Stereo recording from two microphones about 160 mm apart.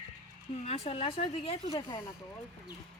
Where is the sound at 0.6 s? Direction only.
40° left (ahead or behind).